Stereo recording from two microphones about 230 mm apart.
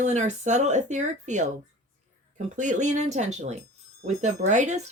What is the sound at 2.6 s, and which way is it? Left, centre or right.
Speech, right.